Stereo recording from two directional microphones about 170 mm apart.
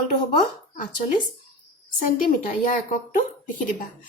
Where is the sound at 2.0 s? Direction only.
55° left (ahead or behind).